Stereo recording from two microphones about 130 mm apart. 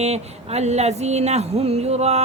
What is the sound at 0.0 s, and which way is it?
Music, 55° right (ahead or behind).